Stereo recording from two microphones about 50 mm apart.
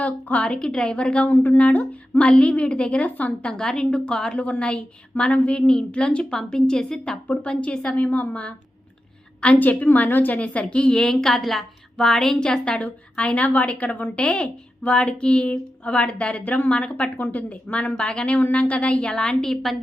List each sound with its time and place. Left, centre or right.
0.0 s a woman's voice: left
3.5 s a woman's voice: centre; by 10.3 s left
10.3 s a woman's voice: left
16.4 s a woman's voice: left
16.6 s a woman's voice: left